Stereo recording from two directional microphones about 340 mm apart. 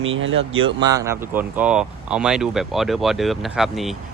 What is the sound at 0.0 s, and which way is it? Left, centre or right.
Speech, right.